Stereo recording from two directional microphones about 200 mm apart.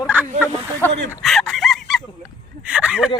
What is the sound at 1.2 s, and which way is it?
Chicken, centre (ahead or behind).